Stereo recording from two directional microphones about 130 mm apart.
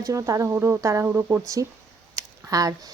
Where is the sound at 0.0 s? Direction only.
25° right (ahead or behind).